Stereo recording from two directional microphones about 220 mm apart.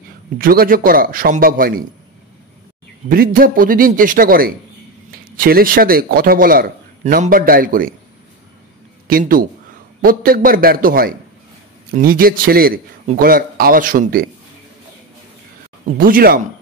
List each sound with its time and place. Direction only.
0.4 s a man's voice: 40° right (ahead or behind)
3.1 s a man's voice: 40° right (ahead or behind)
9.0 s a man's voice: 40° right (ahead or behind)
16.0 s a man's voice: 40° right (ahead or behind)